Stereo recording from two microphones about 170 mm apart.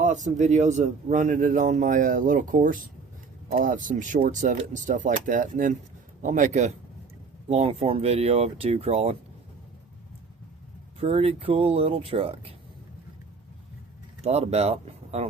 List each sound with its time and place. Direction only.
0.0 s speech: 45° right (ahead or behind)
11.0 s speech: 35° right (ahead or behind)
14.3 s speech: 40° right (ahead or behind)